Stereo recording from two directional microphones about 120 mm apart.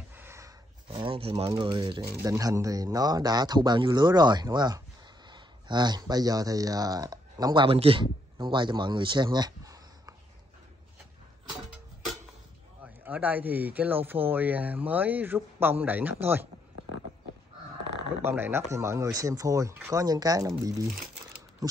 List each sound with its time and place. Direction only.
0.1 s a sound: 20° right (ahead or behind)
0.8 s speech: 50° right (ahead or behind)
2.2 s speech: 25° right (ahead or behind)
7.6 s speech: 50° right (ahead or behind); by 10.1 s 30° right (ahead or behind)
12.8 s speech: 15° right (ahead or behind)
18.2 s speech: 20° right (ahead or behind)